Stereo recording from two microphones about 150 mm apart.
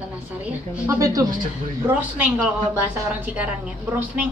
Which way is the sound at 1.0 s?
20° right (ahead or behind).